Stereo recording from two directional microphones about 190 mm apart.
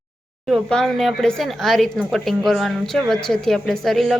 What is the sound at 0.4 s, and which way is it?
Speech, centre (ahead or behind).